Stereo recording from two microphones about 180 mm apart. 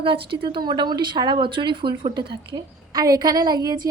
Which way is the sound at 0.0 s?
30° right (ahead or behind).